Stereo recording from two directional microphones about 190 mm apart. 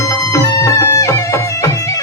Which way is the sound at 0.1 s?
15° left (ahead or behind).